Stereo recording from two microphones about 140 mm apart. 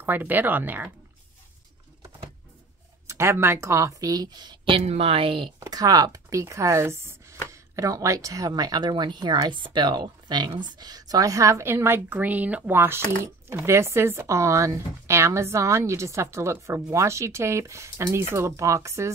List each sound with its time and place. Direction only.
0.0 s speech: 15° right (ahead or behind)
3.1 s speech: 20° right (ahead or behind); by 5.5 s 40° right (ahead or behind)
5.6 s speech: 25° right (ahead or behind)